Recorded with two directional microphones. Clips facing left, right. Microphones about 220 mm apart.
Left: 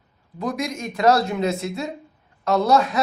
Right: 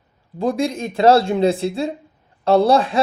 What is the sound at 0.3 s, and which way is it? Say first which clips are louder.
Speech: right 6 dB; 30° right (ahead or behind).